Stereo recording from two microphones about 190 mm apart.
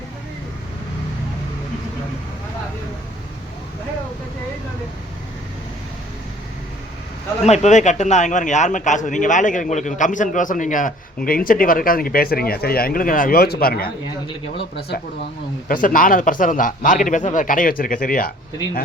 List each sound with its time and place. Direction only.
7.4 s a man's voice: 35° left (ahead or behind); by 13.9 s 50° left (ahead or behind)
15.7 s a man's voice: 45° left (ahead or behind)